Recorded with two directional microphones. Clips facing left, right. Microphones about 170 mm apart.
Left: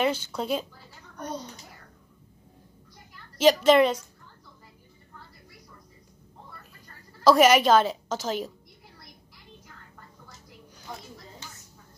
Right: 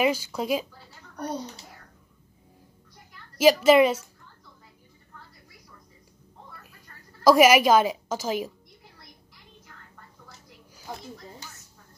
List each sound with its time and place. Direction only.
0.0 s a woman's voice: 10° right (ahead or behind)
3.3 s a woman's voice: 10° right (ahead or behind)
7.2 s a woman's voice: 10° right (ahead or behind)